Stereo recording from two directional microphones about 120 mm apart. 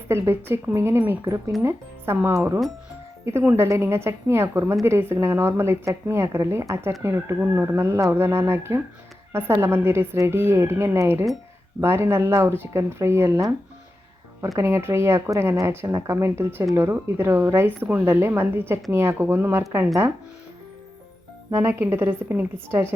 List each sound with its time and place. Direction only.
0.1 s a woman's voice: 20° right (ahead or behind)
21.5 s a woman's voice: 20° right (ahead or behind)